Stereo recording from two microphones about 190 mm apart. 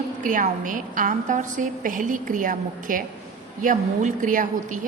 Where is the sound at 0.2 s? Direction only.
45° right (ahead or behind).